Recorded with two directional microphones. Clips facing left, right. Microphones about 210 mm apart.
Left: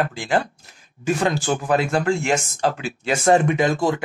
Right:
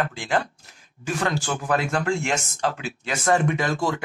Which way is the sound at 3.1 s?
25° left (ahead or behind).